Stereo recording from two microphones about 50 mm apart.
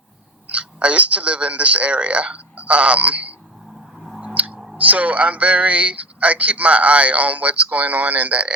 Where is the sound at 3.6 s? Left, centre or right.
Centre.